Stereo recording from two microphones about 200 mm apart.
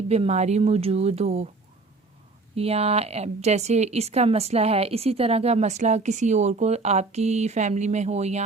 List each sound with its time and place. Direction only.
0.1 s speech: 35° right (ahead or behind)
2.6 s speech: 30° right (ahead or behind)